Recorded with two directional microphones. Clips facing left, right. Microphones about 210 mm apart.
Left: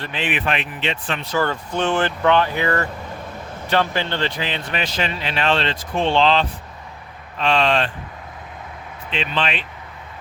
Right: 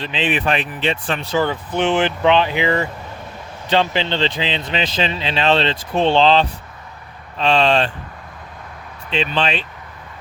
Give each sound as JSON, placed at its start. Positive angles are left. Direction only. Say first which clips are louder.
{"t": 0.0, "sound": "speech", "louder": "right 4 dB", "side_deg": -20}
{"t": 0.3, "sound": "speech", "louder": "right 3 dB", "side_deg": -35}
{"t": 1.3, "sound": "speech", "louder": "right 2 dB", "side_deg": -20}
{"t": 9.0, "sound": "speech", "louder": "right 4 dB", "side_deg": -30}